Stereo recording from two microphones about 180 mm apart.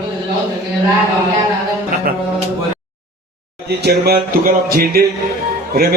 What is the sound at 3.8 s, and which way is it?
A man's voice, 60° right (ahead or behind).